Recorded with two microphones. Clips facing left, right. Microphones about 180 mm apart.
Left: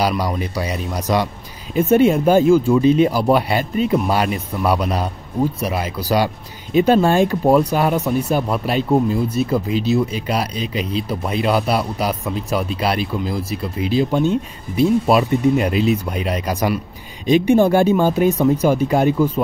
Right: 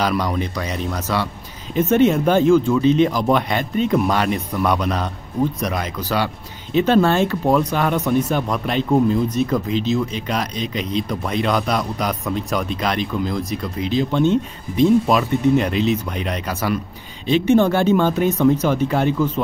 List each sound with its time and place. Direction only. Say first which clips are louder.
0.2 s speech: left 1 dB; 10° left (ahead or behind)